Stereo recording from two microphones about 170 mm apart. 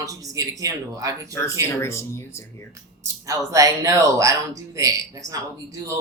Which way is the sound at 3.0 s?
20° right (ahead or behind).